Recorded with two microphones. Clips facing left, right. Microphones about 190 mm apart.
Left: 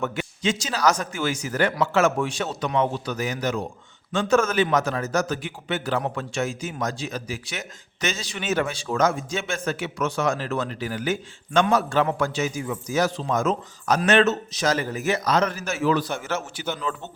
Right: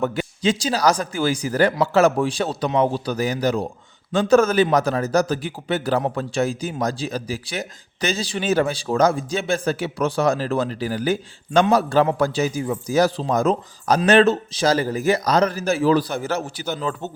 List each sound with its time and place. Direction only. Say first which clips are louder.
0.0 s speech: right 5 dB; 35° right (ahead or behind)